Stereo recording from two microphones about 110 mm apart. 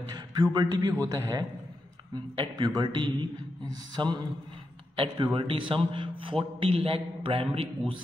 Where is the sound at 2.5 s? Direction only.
40° right (ahead or behind).